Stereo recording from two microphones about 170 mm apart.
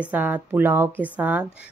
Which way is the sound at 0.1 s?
10° right (ahead or behind).